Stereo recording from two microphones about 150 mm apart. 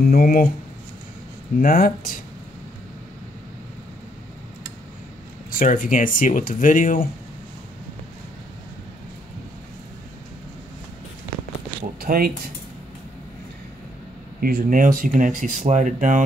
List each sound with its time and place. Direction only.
0.0 s speech: 75° left (ahead or behind)
1.6 s speech: 70° left (ahead or behind)
5.5 s speech: 65° left (ahead or behind)
12.0 s speech: 85° right
14.4 s speech: 75° right (ahead or behind); by 16.3 s 55° right (ahead or behind)